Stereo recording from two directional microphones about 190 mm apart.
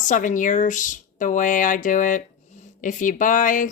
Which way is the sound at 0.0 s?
40° left (ahead or behind).